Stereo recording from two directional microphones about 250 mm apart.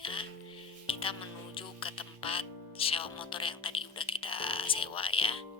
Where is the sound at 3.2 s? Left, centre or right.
Centre.